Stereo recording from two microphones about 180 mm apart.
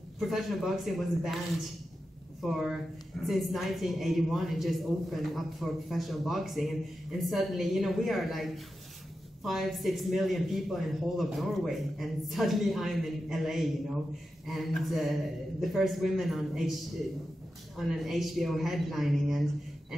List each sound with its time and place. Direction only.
0.2 s a man's voice: centre (ahead or behind)
2.4 s a man's voice: centre (ahead or behind)
17.7 s a man's voice: centre (ahead or behind)